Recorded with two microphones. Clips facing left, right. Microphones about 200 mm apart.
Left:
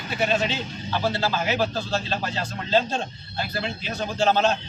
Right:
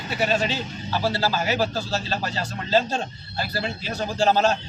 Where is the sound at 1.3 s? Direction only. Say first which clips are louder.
Right 1 dB; 40° right (ahead or behind).